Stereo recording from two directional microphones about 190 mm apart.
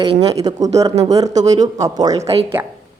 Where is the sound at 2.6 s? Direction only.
10° right (ahead or behind).